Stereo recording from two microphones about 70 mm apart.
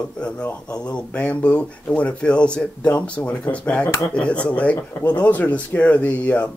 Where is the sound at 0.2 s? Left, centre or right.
Centre.